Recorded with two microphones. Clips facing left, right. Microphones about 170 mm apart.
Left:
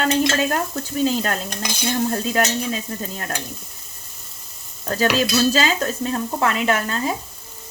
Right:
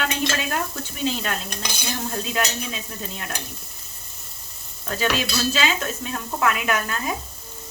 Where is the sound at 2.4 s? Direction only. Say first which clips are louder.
Left 5 dB; 40° left (ahead or behind).